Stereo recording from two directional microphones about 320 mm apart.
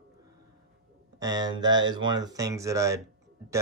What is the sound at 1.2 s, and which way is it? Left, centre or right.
Speech, centre.